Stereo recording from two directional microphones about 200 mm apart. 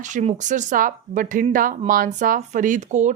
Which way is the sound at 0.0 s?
35° right (ahead or behind).